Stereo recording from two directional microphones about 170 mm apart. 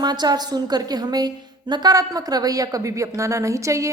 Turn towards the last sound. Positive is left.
turn(degrees=-20)  # may be behind; listen again after turning